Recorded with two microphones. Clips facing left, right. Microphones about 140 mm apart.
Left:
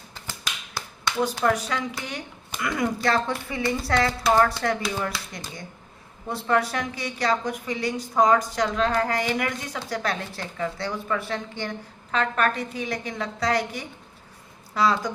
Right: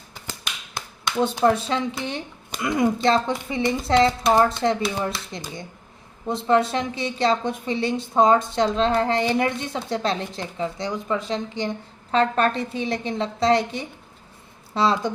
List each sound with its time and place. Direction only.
1.5 s a woman's voice: 25° right (ahead or behind)
6.2 s a woman's voice: 25° right (ahead or behind)
12.1 s a woman's voice: 30° right (ahead or behind)